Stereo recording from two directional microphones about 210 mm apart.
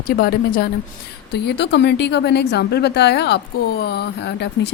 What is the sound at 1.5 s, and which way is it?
Speech, 55° left (ahead or behind).